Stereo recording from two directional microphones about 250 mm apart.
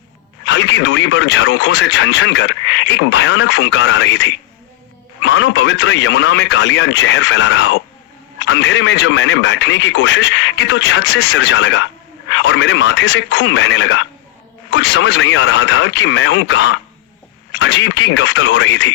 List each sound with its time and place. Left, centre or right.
0.4 s speech: left